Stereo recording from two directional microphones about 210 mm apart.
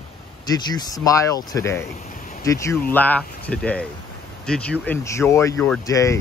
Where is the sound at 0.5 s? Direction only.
15° left (ahead or behind).